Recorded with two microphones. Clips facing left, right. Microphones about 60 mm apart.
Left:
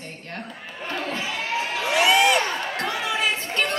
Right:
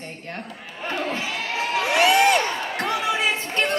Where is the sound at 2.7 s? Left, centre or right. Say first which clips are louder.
Right 2 dB; right.